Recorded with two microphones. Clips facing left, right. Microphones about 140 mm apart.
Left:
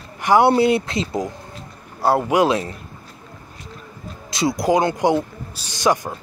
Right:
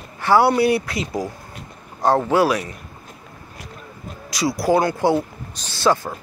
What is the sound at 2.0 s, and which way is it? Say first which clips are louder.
Speech: even; 10° left (ahead or behind).